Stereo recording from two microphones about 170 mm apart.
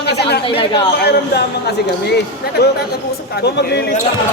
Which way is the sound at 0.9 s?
75° left (ahead or behind).